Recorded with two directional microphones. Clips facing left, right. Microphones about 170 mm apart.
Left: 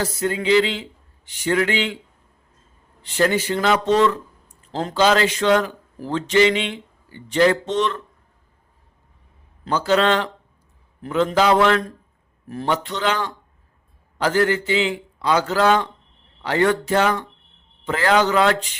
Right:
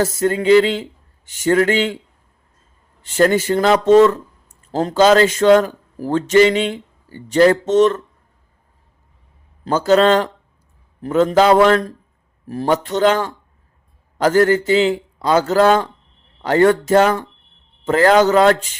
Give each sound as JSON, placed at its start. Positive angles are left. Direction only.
{"t": 0.0, "sound": "a man's voice", "side_deg": -45}
{"t": 3.0, "sound": "a man's voice", "side_deg": -45}
{"t": 9.6, "sound": "a man's voice", "side_deg": -45}